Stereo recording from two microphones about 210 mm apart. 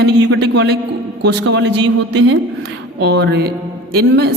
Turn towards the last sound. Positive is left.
turn(degrees=-50)  # may be behind; listen again after turning